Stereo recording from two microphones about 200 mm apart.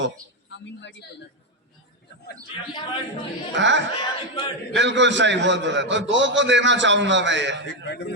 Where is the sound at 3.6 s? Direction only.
65° right (ahead or behind).